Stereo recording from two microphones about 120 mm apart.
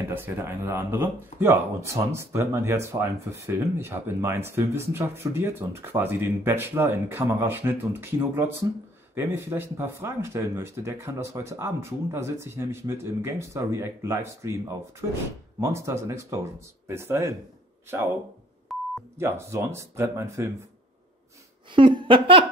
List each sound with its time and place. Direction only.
0.1 s speech: 15° right (ahead or behind)
18.7 s beep: centre (ahead or behind)
19.1 s speech: 20° right (ahead or behind)
21.7 s a sound: 45° right (ahead or behind)